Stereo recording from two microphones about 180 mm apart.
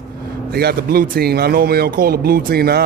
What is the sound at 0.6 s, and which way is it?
Speech, 60° right (ahead or behind).